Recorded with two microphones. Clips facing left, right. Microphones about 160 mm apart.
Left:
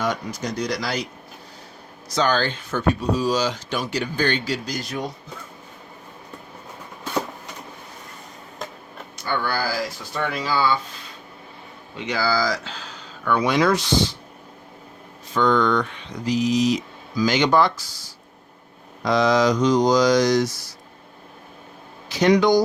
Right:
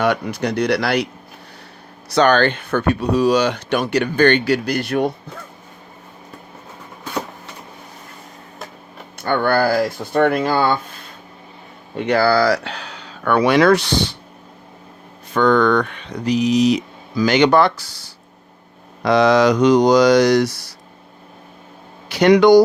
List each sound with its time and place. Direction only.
0.0 s speech: 65° right (ahead or behind)
2.0 s speech: 65° right (ahead or behind)
9.1 s speech: 55° right (ahead or behind)
11.9 s speech: 60° right (ahead or behind)
15.3 s speech: 60° right (ahead or behind)
22.1 s speech: 65° right (ahead or behind)